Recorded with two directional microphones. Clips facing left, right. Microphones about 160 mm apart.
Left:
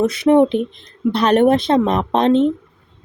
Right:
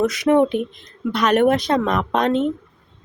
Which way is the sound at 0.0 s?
30° left (ahead or behind).